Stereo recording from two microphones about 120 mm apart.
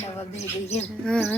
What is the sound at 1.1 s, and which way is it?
Speech, 5° left (ahead or behind).